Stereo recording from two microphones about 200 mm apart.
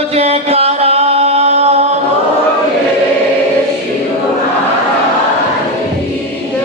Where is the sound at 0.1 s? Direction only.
30° right (ahead or behind).